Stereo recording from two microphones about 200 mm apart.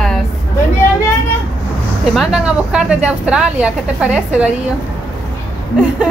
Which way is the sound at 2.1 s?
5° right (ahead or behind).